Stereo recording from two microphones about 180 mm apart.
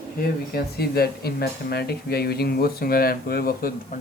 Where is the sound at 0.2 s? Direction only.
60° left (ahead or behind).